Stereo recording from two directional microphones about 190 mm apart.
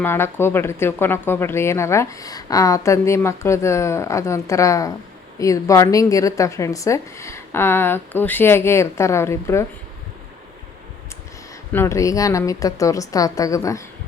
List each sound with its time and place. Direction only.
0.0 s speech: 10° left (ahead or behind)
11.7 s speech: 15° left (ahead or behind)